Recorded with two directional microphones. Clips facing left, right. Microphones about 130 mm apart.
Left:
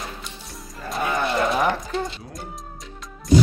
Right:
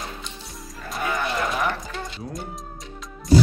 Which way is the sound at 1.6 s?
25° left (ahead or behind).